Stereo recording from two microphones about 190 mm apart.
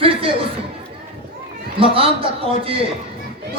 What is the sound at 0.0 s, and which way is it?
Chatter, 30° right (ahead or behind).